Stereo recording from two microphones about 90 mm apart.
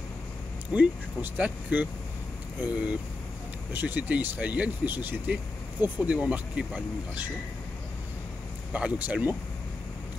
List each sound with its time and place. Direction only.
0.7 s speech: 15° right (ahead or behind)
8.7 s speech: 15° right (ahead or behind)